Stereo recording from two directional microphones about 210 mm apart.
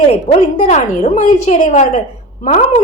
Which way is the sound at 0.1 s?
30° left (ahead or behind).